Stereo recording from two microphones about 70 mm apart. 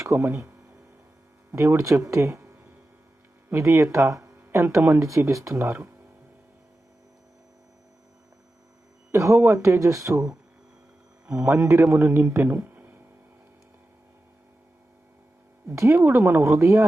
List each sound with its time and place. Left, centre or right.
0.0 s speech: right
0.3 s a sound: right
1.5 s speech: right
4.4 s a sound: right
4.9 s speech: right
9.1 s speech: right
11.3 s a man's voice: right
15.6 s speech: right
16.0 s a man's voice: right